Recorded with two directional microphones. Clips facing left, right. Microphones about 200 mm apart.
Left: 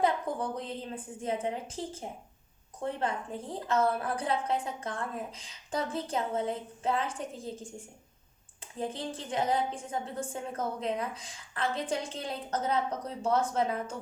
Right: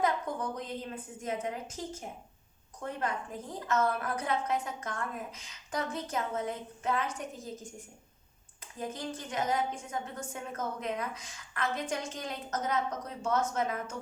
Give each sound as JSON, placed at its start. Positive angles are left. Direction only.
{"t": 0.0, "sound": "a woman's voice", "side_deg": 30}
{"t": 8.6, "sound": "a woman's voice", "side_deg": 30}